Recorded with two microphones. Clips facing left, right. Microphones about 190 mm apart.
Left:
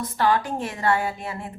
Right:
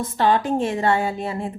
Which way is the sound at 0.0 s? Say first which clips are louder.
Right 3 dB; 25° right (ahead or behind).